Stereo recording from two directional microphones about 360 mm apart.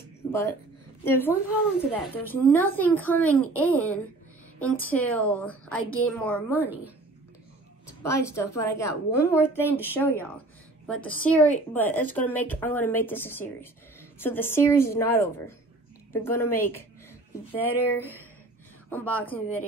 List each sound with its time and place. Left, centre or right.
1.0 s a woman's voice: centre
8.0 s a woman's voice: centre